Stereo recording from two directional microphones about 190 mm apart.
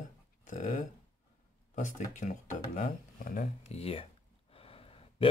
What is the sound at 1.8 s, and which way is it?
Speech, 40° left (ahead or behind).